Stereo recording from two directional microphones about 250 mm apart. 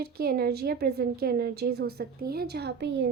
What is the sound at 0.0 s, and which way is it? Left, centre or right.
Speech, right.